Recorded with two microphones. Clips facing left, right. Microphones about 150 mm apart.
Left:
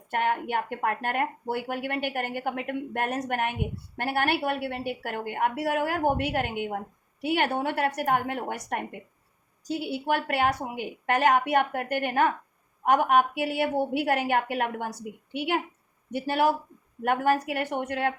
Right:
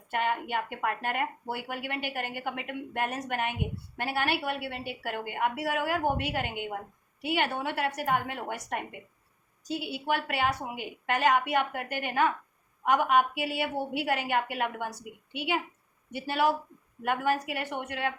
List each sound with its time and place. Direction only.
0.1 s a woman's voice: 50° left (ahead or behind)